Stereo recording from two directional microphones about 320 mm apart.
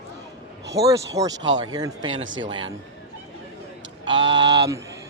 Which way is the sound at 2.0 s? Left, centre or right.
Right.